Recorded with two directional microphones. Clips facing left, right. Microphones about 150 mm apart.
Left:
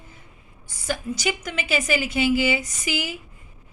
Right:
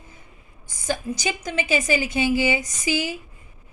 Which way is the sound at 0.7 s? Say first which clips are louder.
Right 1 dB; 15° right (ahead or behind).